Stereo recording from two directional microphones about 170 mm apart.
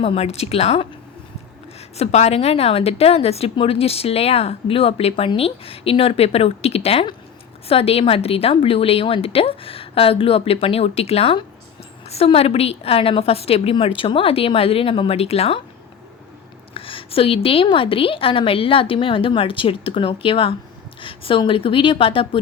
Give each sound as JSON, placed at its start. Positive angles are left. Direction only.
{"t": 0.0, "sound": "a woman's voice", "side_deg": 35}
{"t": 2.0, "sound": "a woman's voice", "side_deg": 40}
{"t": 16.7, "sound": "a woman's voice", "side_deg": 30}